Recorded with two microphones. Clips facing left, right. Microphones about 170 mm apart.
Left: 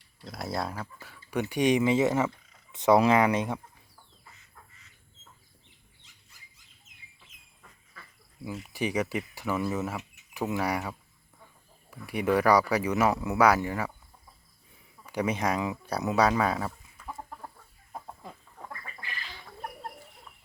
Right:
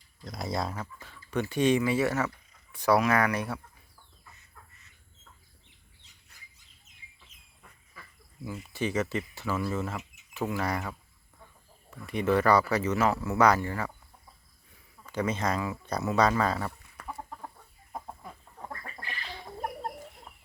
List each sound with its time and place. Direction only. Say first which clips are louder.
0.3 s speech: even; centre (ahead or behind); by 3.6 s 20° left (ahead or behind)
8.0 s duck: right 1 dB; 10° right (ahead or behind)
8.4 s speech: left 1 dB; 15° left (ahead or behind)
15.0 s speech: left 1 dB; 15° left (ahead or behind)
17.0 s chicken: right 1 dB; 70° right (ahead or behind)